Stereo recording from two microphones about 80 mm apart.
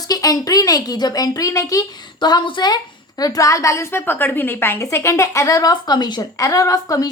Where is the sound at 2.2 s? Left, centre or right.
Left.